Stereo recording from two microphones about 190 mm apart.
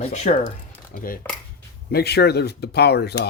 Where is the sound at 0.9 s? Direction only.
50° left (ahead or behind).